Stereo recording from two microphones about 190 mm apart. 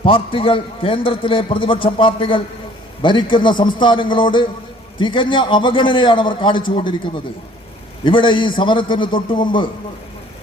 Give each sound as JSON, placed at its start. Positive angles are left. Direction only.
{"t": 0.0, "sound": "a man's voice", "side_deg": 30}